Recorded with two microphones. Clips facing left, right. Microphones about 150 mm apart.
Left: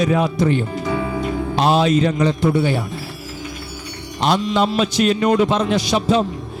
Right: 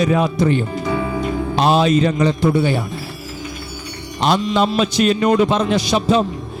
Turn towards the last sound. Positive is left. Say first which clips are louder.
# right 1 dB
turn(degrees=-25)  # may be behind; listen again after turning